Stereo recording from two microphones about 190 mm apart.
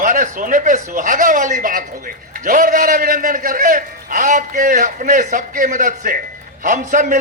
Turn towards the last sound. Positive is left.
turn(degrees=-45)  # may be behind; listen again after turning